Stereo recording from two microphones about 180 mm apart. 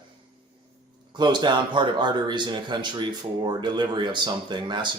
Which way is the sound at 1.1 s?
25° right (ahead or behind).